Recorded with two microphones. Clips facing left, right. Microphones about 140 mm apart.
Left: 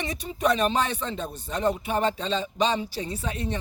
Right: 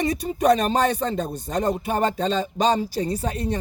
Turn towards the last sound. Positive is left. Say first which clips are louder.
# right 5 dB
turn(degrees=-40)  # may be behind; listen again after turning